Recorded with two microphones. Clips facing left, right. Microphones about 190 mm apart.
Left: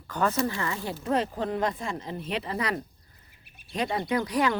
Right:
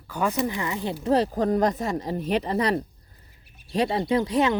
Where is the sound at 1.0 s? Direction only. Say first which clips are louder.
Right 6 dB; 35° right (ahead or behind).